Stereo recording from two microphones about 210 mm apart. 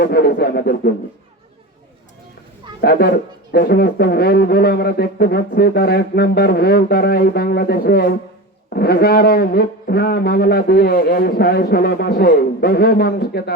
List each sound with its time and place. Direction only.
0.0 s a man's voice: 50° left (ahead or behind)
2.8 s a man's voice: 45° left (ahead or behind)